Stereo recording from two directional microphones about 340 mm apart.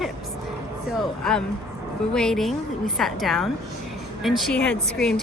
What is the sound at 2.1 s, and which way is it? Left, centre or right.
Speech, centre.